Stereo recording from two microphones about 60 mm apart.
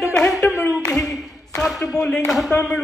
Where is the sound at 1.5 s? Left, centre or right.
Centre.